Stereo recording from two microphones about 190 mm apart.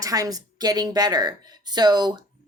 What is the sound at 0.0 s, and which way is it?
A woman's voice, 20° right (ahead or behind).